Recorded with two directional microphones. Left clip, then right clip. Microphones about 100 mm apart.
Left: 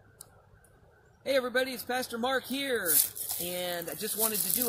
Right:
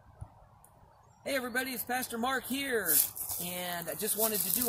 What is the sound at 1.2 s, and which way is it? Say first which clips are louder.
Speech: left 5 dB; 30° right (ahead or behind).